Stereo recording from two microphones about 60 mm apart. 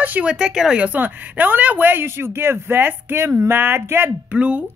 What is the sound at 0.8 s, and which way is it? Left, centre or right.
Speech, right.